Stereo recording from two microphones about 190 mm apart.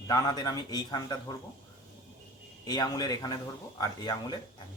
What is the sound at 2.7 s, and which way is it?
Speech, 20° left (ahead or behind).